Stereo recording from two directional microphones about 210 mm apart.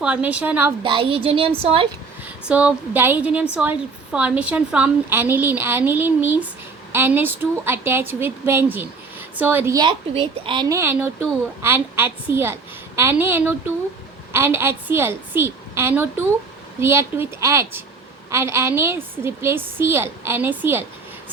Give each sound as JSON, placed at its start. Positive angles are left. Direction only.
{"t": 0.0, "sound": "a woman's voice", "side_deg": -5}
{"t": 0.8, "sound": "a woman's voice", "side_deg": -25}
{"t": 2.2, "sound": "a woman's voice", "side_deg": -5}